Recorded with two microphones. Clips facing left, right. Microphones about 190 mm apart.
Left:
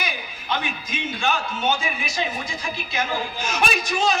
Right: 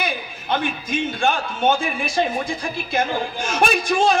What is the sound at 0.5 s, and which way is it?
A man's voice, 55° right (ahead or behind).